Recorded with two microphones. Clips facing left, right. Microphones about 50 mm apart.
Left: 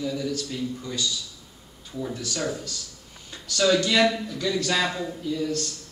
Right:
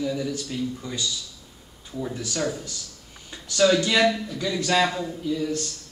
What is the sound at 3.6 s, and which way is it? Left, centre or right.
Speech, centre.